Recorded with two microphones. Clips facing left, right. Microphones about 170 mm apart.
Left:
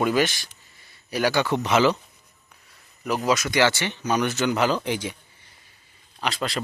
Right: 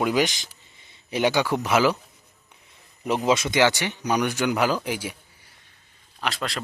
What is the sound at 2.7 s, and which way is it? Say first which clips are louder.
A man's voice: right 1 dB; 25° right (ahead or behind).